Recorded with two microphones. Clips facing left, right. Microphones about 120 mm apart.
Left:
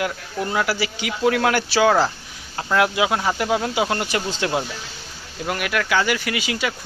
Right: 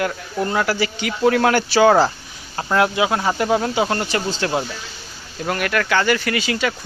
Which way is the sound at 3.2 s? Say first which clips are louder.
Right 3 dB; centre (ahead or behind).